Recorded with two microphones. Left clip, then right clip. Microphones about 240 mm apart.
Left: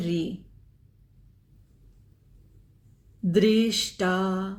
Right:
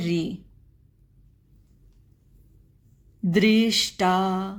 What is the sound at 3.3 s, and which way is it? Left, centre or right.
A woman's voice, right.